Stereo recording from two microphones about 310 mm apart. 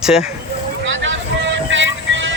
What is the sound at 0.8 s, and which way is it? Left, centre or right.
Vehicle, right.